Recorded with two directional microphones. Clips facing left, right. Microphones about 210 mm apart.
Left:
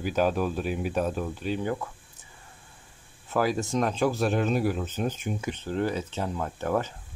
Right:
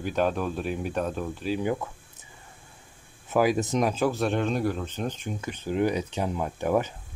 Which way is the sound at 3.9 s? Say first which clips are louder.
Even; centre (ahead or behind).